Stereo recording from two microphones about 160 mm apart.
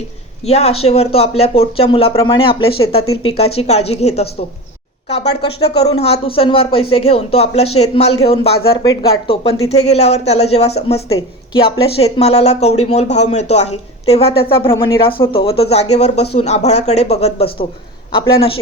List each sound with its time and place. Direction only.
0.4 s speech: 40° left (ahead or behind)
8.8 s speech: 30° left (ahead or behind)